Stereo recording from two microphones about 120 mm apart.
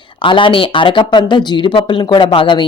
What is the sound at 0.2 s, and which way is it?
A man's voice, 45° left (ahead or behind).